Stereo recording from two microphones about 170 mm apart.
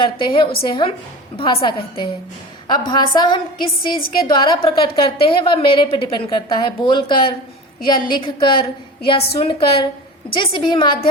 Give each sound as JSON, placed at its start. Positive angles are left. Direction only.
{"t": 0.0, "sound": "a woman's voice", "side_deg": 30}